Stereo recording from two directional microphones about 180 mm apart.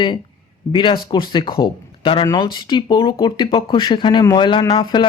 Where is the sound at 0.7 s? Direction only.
25° left (ahead or behind).